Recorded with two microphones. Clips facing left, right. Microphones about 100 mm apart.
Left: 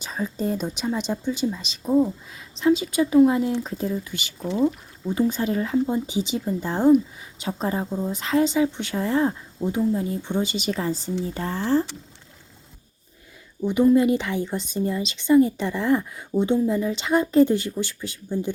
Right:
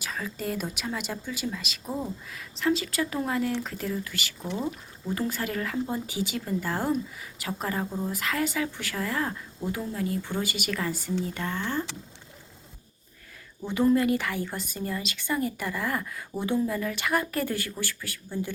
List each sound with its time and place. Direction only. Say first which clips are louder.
0.0 s a woman's voice: left 6 dB; 25° left (ahead or behind)
13.9 s a woman's voice: left 5 dB; 20° left (ahead or behind)